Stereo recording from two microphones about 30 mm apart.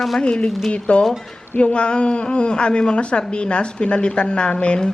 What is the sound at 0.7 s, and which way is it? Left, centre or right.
A woman's voice, left.